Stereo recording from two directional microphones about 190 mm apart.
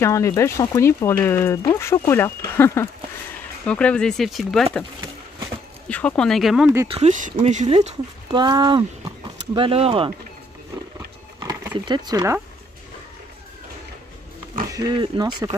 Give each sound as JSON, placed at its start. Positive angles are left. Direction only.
{"t": 0.0, "sound": "speech", "side_deg": 15}
{"t": 5.9, "sound": "speech", "side_deg": 5}
{"t": 6.9, "sound": "speech", "side_deg": -40}
{"t": 8.3, "sound": "speech", "side_deg": -20}
{"t": 11.3, "sound": "speech", "side_deg": -15}
{"t": 14.7, "sound": "speech", "side_deg": -25}